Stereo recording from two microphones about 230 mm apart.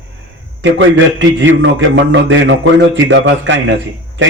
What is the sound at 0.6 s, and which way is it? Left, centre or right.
A man's voice, right.